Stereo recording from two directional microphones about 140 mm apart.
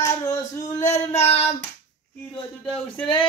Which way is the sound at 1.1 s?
50° left (ahead or behind).